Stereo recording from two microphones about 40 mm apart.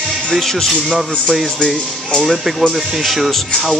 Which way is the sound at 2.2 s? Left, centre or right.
Centre.